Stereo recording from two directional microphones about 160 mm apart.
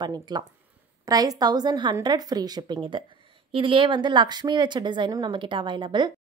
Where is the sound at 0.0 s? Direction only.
25° right (ahead or behind).